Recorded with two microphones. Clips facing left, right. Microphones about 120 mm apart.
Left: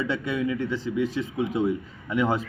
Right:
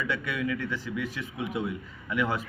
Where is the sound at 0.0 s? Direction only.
25° left (ahead or behind).